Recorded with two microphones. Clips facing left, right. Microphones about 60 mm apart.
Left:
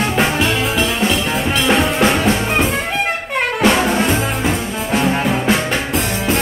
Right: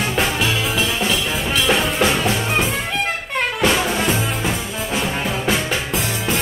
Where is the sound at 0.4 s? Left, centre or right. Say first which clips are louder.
Left 3 dB; centre.